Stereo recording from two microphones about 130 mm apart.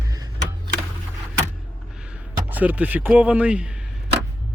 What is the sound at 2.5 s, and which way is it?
Speech, 15° right (ahead or behind).